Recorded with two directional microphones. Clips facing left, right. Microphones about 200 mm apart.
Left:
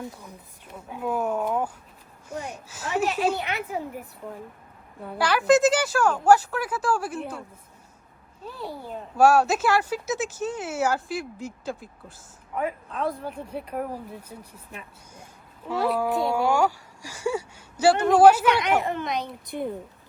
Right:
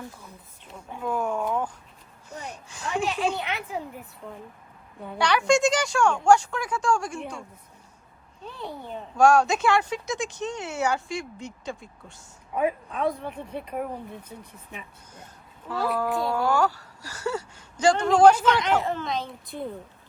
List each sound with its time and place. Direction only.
0.2 s a woman's voice: 10° left (ahead or behind)
5.0 s a child's voice: 5° left (ahead or behind)
8.4 s a child's voice: 5° left (ahead or behind)
16.0 s a woman's voice: 20° left (ahead or behind); by 18.4 s 5° left (ahead or behind)
18.6 s a woman's voice: 15° left (ahead or behind)